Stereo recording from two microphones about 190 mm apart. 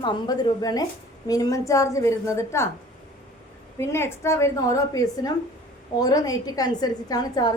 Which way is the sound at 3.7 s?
15° left (ahead or behind).